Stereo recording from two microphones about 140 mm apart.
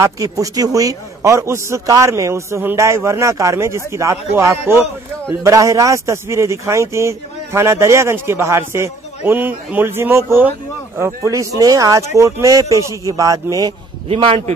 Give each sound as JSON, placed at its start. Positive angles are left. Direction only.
{"t": 0.0, "sound": "speech", "side_deg": -25}
{"t": 14.0, "sound": "a man's voice", "side_deg": -45}